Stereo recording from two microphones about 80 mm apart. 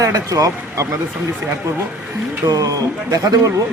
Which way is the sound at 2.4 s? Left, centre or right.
Right.